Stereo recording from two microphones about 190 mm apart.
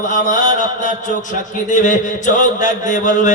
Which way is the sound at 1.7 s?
40° left (ahead or behind).